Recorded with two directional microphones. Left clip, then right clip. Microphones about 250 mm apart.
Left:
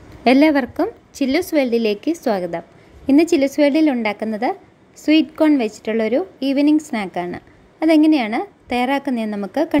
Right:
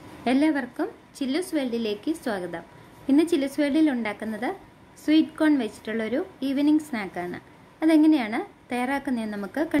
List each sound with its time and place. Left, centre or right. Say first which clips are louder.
0.2 s a woman's voice: left 10 dB; left